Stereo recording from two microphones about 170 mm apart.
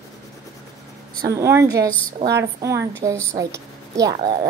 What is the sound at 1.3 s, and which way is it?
A woman's voice, 15° right (ahead or behind).